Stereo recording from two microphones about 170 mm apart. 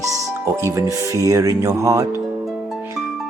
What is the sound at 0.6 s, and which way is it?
Speech, 20° right (ahead or behind).